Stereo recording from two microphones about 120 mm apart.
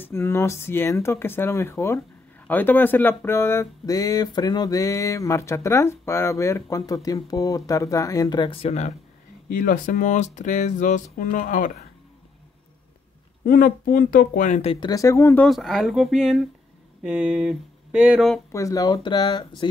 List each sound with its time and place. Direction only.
0.0 s speech: 20° left (ahead or behind); by 8.5 s 35° left (ahead or behind)
8.5 s speech: 65° left (ahead or behind)
9.6 s speech: 90° left
14.4 s speech: 90° left
14.9 s speech: 25° left (ahead or behind)
15.4 s speech: centre (ahead or behind)
18.5 s speech: 25° left (ahead or behind)